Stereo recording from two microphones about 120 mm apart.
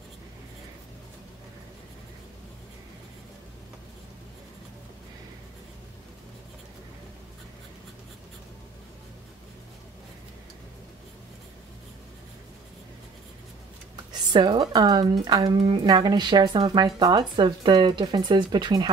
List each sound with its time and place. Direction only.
14.3 s speech: 40° right (ahead or behind)